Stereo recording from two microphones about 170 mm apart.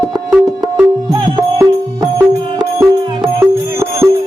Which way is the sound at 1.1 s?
25° right (ahead or behind).